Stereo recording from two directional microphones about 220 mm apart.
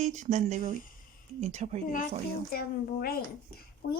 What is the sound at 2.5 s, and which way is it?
Speech, 40° left (ahead or behind).